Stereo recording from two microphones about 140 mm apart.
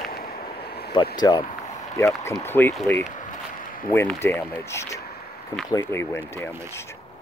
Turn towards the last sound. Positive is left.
turn(degrees=15)  # may be behind; listen again after turning